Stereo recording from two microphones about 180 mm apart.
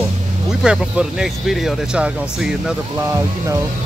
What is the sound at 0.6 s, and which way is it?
Speech, 5° right (ahead or behind).